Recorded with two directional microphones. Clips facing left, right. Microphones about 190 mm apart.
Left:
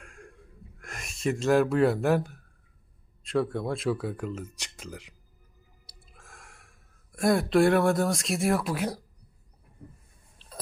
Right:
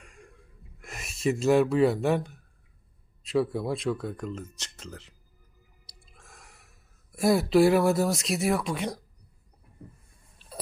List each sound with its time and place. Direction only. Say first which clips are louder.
0.0 s wheeze: left 3 dB; centre (ahead or behind)
0.8 s speech: right 1 dB; 5° right (ahead or behind)
6.0 s a sound: left 1 dB; centre (ahead or behind)